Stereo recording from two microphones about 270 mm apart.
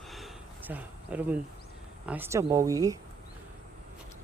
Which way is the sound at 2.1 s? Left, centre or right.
Centre.